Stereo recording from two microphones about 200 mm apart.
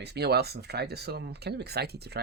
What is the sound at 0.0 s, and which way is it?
Speech, 55° right (ahead or behind).